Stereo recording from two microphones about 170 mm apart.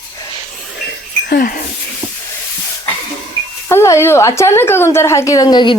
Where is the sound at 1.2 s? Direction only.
60° left (ahead or behind).